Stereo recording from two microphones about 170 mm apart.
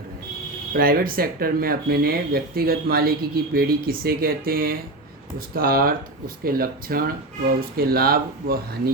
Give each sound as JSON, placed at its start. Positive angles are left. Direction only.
{"t": 0.7, "sound": "speech", "side_deg": -60}